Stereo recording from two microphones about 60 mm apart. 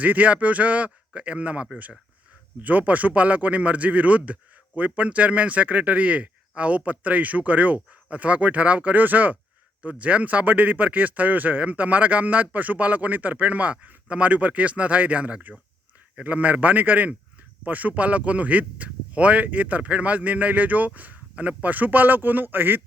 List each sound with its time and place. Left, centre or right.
0.0 s speech: right